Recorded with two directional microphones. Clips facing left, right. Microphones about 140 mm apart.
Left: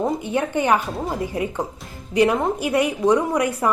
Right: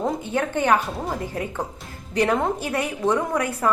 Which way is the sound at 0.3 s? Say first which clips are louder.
Even; 15° left (ahead or behind).